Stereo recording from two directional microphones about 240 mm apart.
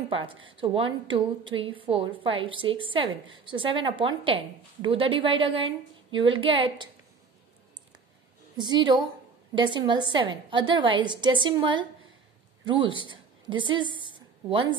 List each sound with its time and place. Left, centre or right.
0.1 s a woman's voice: right
8.5 s a woman's voice: centre
14.0 s a sound: right